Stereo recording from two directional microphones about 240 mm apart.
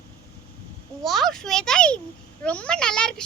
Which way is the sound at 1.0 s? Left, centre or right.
Centre.